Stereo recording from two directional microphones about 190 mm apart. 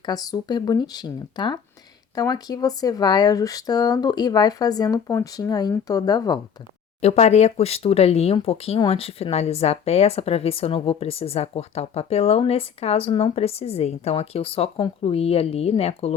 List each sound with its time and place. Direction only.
0.0 s speech: 20° left (ahead or behind)
7.0 s a woman's voice: 35° left (ahead or behind)